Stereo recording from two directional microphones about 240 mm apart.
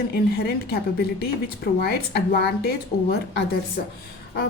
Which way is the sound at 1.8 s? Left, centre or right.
Left.